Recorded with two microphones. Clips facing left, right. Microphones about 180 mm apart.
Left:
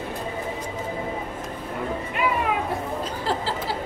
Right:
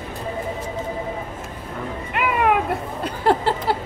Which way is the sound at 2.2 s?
65° right (ahead or behind).